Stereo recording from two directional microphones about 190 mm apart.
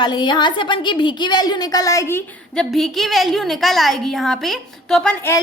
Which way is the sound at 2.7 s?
Centre (ahead or behind).